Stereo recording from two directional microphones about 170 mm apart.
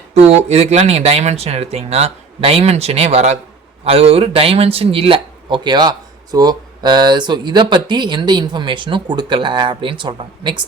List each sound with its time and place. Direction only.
0.1 s speech: 40° right (ahead or behind)